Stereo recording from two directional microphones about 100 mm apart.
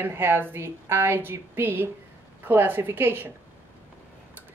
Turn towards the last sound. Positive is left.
turn(degrees=-20)  # may be behind; listen again after turning